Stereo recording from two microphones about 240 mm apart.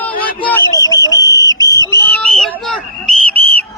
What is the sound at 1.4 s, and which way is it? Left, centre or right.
Whistle, centre.